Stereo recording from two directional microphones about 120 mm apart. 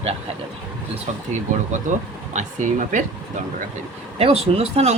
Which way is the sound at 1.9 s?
90° right.